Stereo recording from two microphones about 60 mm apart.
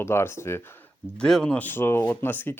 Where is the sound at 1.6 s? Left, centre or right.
Left.